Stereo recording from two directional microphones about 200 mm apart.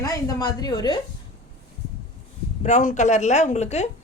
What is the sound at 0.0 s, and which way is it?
Speech, 15° left (ahead or behind).